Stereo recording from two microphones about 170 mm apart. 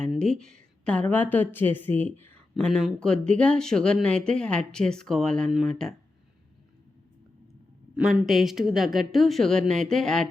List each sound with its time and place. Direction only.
0.0 s a woman's voice: 5° left (ahead or behind)
7.9 s a woman's voice: 5° right (ahead or behind)